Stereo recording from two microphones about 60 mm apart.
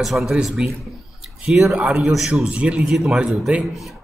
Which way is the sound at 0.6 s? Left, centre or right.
Centre.